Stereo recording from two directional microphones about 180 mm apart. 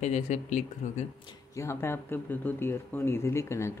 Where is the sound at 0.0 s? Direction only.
40° left (ahead or behind).